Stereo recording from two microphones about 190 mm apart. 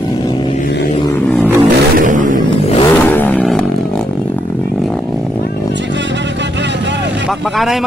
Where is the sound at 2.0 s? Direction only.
45° right (ahead or behind).